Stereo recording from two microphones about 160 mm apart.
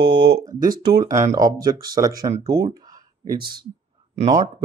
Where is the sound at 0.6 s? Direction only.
65° right (ahead or behind).